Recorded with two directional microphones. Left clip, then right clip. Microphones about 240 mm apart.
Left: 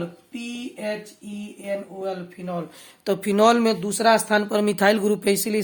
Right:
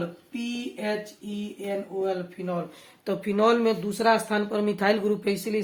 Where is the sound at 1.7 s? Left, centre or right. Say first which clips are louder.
Even; left.